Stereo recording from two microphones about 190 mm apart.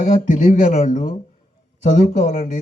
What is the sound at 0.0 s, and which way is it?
A man's voice, 45° left (ahead or behind).